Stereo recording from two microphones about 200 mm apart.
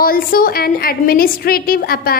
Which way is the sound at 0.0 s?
45° left (ahead or behind).